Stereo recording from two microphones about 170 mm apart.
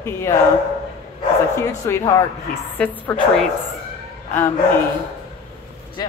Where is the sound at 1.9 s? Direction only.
15° left (ahead or behind).